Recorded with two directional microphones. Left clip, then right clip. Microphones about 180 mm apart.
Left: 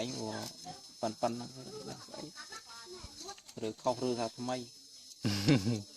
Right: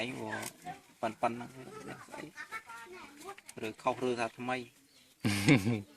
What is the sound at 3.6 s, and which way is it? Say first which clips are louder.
Speech: right 1 dB; 35° left (ahead or behind).